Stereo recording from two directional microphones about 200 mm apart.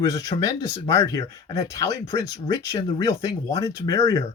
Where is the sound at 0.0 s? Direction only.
15° left (ahead or behind).